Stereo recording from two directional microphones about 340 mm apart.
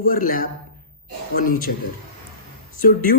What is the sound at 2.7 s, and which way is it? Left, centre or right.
Speech, left.